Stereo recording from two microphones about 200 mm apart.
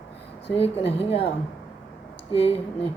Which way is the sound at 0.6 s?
30° left (ahead or behind).